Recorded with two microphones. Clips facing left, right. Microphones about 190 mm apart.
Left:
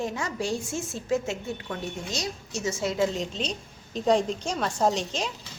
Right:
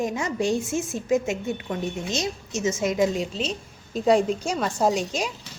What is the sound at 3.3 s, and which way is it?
A woman's voice, 5° right (ahead or behind).